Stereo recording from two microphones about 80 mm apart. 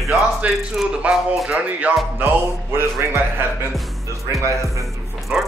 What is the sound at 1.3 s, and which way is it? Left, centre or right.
Speech, centre.